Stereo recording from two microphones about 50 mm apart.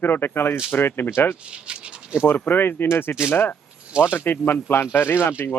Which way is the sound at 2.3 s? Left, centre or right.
Left.